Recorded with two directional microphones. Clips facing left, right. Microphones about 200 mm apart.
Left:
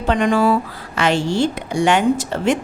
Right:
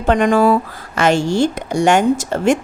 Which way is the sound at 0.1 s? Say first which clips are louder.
Right 3 dB; 50° right (ahead or behind).